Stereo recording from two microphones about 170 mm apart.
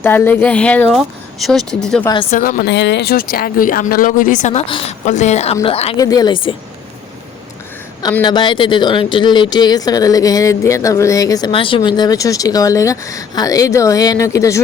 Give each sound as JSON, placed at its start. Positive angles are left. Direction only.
{"t": 0.0, "sound": "speech", "side_deg": 15}
{"t": 2.3, "sound": "speech", "side_deg": 55}
{"t": 4.6, "sound": "a woman's voice", "side_deg": 30}
{"t": 6.0, "sound": "speech", "side_deg": 20}
{"t": 8.2, "sound": "speech", "side_deg": 30}